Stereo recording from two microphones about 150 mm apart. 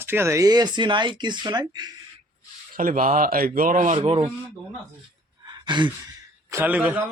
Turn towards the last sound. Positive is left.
turn(degrees=-10)  # may be behind; listen again after turning